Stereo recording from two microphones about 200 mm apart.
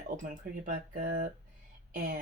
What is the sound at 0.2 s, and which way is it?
Speech, 40° right (ahead or behind).